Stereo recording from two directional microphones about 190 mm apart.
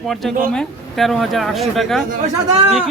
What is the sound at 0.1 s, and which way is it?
Speech, centre (ahead or behind).